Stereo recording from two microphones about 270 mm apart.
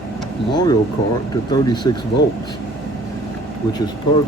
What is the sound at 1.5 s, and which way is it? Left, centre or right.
Speech, centre.